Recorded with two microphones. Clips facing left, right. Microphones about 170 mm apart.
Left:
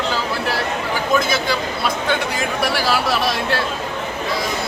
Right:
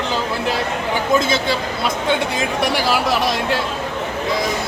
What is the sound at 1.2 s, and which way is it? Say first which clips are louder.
Speech: right 1 dB; 25° right (ahead or behind).